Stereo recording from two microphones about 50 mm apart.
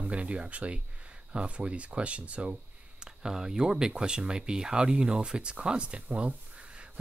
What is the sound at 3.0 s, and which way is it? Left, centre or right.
Speech, centre.